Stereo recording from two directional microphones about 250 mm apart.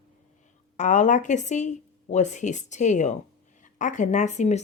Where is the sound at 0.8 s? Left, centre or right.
Left.